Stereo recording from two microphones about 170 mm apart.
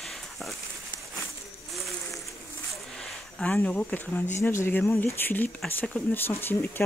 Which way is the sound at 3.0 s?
5° left (ahead or behind).